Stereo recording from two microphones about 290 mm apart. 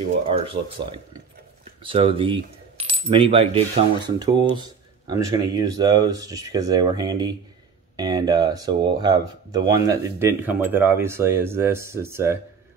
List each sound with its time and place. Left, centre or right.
0.3 s coin: centre